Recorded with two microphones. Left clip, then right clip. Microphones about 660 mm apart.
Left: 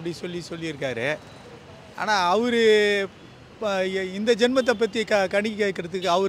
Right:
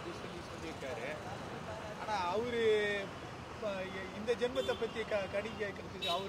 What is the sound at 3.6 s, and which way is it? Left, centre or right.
Speech, left.